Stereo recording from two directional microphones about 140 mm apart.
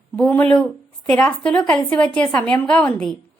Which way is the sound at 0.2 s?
10° left (ahead or behind).